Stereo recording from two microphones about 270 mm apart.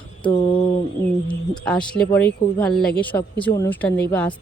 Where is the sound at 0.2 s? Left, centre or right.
Centre.